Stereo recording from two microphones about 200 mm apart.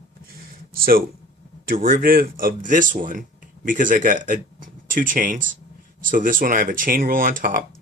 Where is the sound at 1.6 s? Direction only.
45° right (ahead or behind).